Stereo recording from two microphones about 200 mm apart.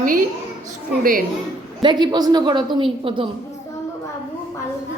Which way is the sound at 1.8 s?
20° right (ahead or behind).